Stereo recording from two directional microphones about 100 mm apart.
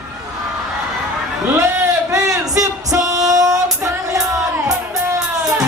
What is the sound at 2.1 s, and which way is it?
Singing, 35° right (ahead or behind).